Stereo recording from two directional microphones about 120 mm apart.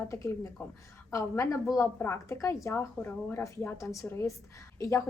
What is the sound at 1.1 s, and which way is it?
A woman's voice, 25° left (ahead or behind).